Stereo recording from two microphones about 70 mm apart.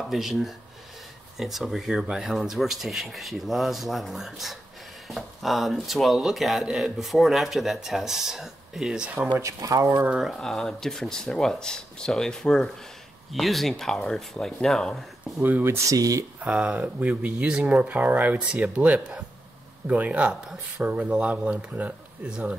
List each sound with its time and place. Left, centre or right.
0.1 s speech: centre
9.4 s speech: right
10.2 s speech: centre
15.6 s speech: right
15.9 s speech: right
16.3 s speech: centre